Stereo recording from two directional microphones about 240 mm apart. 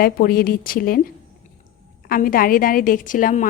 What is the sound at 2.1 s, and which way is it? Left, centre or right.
A woman's voice, left.